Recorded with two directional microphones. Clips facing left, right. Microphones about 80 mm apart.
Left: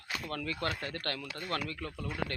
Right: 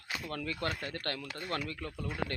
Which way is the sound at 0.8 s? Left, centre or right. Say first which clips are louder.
Left 1 dB; left.